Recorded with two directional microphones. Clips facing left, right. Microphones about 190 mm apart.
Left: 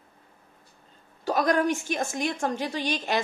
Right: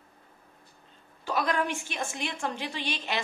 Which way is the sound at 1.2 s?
40° left (ahead or behind).